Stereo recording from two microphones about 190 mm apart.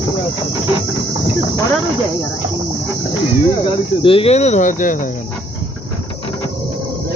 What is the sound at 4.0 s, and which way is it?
Speech, 30° left (ahead or behind).